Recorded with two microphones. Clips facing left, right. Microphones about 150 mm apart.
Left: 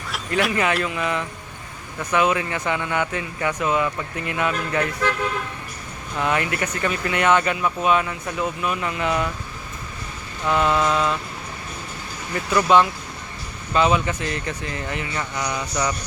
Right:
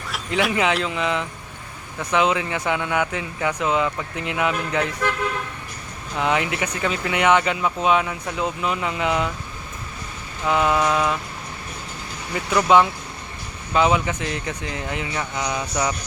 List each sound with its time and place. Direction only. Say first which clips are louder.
0.3 s speech: even; centre (ahead or behind)
0.8 s speech: right 1 dB; 20° right (ahead or behind)
6.1 s speech: right 1 dB; 15° right (ahead or behind)
10.4 s speech: even; 10° right (ahead or behind)
12.3 s speech: even; 20° right (ahead or behind)